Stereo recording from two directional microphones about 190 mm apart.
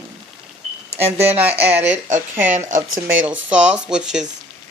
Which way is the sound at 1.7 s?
40° right (ahead or behind).